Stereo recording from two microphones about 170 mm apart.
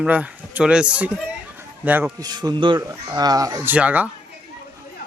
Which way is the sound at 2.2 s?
25° right (ahead or behind).